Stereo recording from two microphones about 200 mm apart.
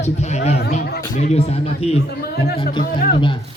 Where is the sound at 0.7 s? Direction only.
50° left (ahead or behind).